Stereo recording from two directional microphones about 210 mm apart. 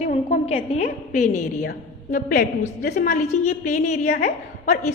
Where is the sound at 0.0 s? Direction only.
30° left (ahead or behind).